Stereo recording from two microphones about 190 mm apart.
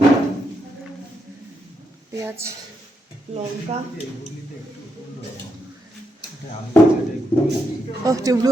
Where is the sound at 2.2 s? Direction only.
15° right (ahead or behind).